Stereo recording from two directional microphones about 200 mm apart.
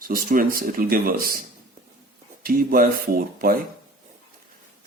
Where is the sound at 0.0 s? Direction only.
45° right (ahead or behind).